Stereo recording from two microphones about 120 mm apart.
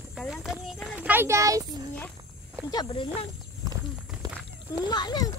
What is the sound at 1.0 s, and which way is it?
Speech, 20° right (ahead or behind).